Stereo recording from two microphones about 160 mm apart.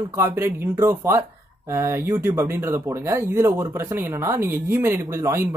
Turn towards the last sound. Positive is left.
turn(degrees=-15)  # may be behind; listen again after turning